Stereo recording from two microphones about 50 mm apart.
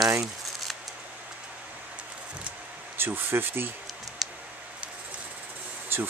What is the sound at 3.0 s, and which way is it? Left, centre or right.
Speech, right.